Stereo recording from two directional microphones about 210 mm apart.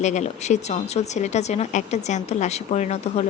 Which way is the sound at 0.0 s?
35° left (ahead or behind).